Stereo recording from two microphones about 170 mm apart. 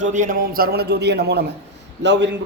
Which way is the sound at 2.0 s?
90° right.